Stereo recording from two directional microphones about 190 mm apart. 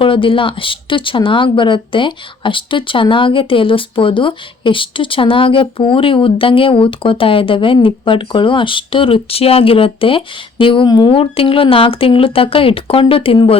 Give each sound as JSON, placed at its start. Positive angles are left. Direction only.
{"t": 0.0, "sound": "speech", "side_deg": 25}